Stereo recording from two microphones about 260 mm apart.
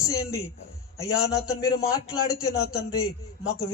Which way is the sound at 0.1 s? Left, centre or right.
Centre.